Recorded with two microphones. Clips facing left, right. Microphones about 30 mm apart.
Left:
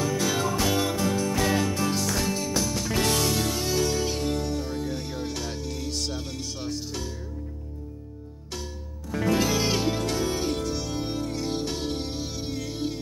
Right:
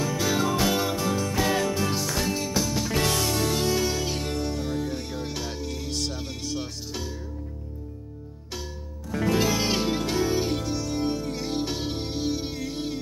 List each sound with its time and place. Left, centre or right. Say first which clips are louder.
0.0 s music: right 1 dB; centre
9.1 s music: even; centre